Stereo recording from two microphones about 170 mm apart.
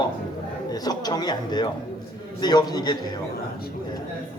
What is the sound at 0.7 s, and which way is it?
A man's voice, 20° left (ahead or behind).